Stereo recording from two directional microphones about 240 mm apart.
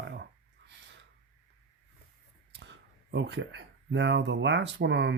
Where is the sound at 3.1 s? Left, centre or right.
Right.